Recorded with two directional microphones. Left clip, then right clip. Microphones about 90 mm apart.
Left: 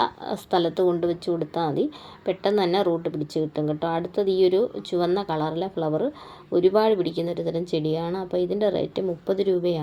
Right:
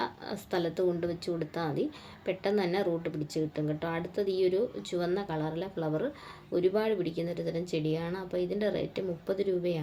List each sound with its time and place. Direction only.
0.0 s a woman's voice: 35° left (ahead or behind)